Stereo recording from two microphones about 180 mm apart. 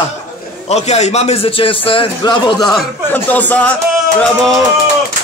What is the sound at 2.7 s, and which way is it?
A man's voice, 10° left (ahead or behind).